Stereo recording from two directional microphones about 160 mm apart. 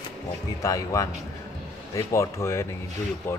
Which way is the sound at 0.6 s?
20° left (ahead or behind).